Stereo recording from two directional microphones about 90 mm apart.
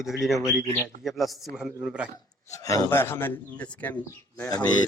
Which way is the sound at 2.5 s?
40° left (ahead or behind).